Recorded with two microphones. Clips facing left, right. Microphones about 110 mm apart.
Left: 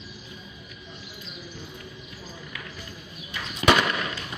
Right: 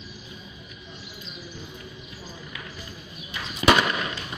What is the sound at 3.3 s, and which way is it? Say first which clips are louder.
Fireworks: right 1 dB; 20° right (ahead or behind).